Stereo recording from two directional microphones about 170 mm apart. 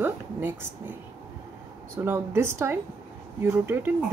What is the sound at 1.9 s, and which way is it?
Speech, 15° right (ahead or behind).